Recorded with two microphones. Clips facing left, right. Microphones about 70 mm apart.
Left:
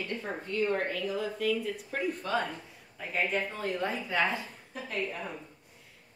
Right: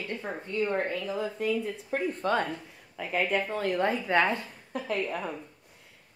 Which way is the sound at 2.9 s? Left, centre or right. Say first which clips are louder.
Right 3 dB; right.